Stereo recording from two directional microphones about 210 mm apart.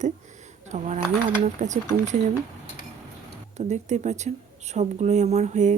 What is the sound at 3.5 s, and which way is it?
Speech, 35° right (ahead or behind).